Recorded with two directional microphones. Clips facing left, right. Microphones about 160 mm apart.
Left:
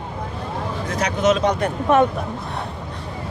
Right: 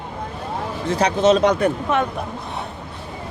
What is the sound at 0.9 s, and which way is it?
Speech, 30° right (ahead or behind).